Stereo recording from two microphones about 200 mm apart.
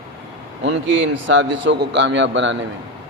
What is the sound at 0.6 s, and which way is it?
A man's voice, 70° right (ahead or behind).